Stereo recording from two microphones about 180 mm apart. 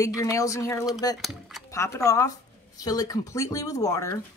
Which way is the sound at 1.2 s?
Centre (ahead or behind).